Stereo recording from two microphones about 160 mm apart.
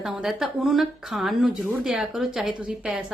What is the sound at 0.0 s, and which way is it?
Speech, centre (ahead or behind).